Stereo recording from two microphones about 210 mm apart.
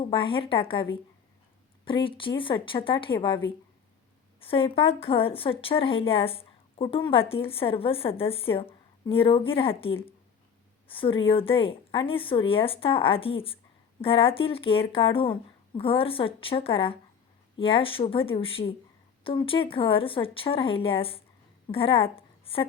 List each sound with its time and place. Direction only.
0.1 s a woman's voice: 25° left (ahead or behind)